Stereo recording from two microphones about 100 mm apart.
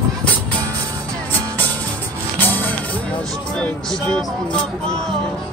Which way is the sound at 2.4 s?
20° left (ahead or behind).